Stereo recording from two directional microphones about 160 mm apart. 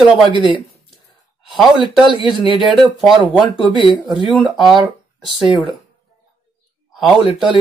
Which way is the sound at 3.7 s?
30° right (ahead or behind).